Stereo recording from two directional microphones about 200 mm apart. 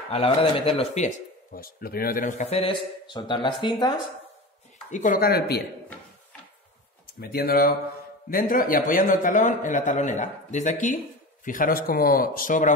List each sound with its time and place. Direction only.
0.1 s speech: 30° left (ahead or behind)
4.9 s speech: 40° left (ahead or behind)
7.2 s speech: 50° left (ahead or behind)